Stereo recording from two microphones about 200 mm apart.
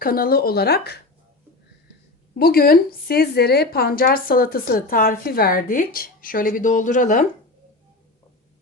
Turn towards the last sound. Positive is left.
turn(degrees=40)  # may be behind; listen again after turning